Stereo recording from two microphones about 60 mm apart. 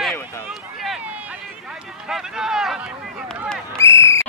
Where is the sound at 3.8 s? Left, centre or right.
Left.